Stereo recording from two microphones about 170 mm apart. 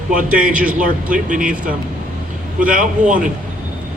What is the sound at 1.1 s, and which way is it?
Speech, 55° right (ahead or behind).